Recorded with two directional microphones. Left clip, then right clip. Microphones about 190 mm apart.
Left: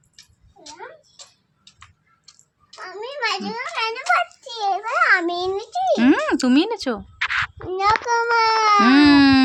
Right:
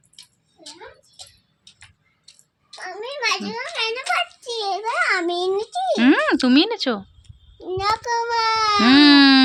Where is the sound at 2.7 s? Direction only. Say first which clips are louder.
Right 1 dB; centre (ahead or behind).